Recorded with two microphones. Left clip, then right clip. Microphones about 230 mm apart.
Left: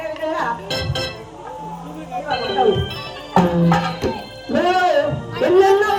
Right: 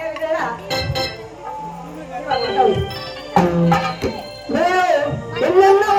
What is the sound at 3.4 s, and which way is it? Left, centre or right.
Music, centre.